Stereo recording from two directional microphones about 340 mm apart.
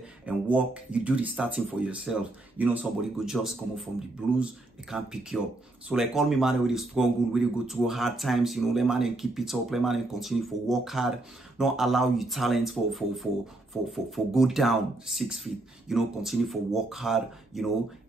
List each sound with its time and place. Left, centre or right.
0.3 s speech: centre